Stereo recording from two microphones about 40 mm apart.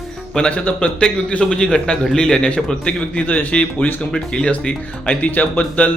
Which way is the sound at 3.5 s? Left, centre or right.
Left.